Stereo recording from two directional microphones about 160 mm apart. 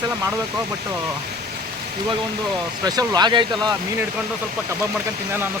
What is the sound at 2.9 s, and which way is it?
Speech, 25° right (ahead or behind).